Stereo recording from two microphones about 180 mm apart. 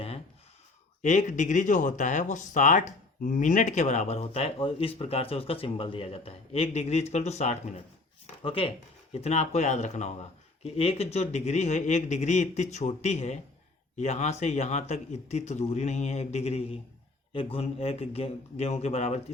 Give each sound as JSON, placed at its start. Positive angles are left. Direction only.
{"t": 1.0, "sound": "speech", "side_deg": 45}